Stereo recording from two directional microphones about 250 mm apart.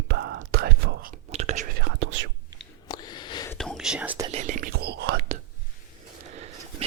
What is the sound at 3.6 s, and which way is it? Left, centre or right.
Whispering, centre.